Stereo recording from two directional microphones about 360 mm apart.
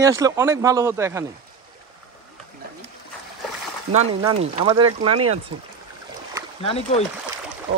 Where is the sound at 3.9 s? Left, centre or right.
Centre.